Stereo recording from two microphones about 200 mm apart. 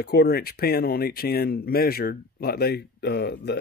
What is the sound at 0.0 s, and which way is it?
Speech, 50° left (ahead or behind).